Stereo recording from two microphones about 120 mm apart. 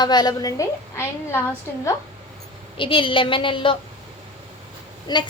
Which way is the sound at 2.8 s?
45° left (ahead or behind).